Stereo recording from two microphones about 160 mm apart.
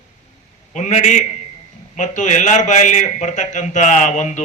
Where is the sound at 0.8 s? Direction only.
50° left (ahead or behind).